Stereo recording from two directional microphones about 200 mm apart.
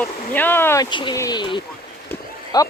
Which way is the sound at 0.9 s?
20° left (ahead or behind).